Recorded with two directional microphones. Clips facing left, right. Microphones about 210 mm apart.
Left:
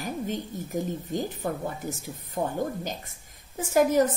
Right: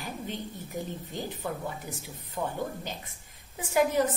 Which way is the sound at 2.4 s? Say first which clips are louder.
Left 4 dB; 35° left (ahead or behind).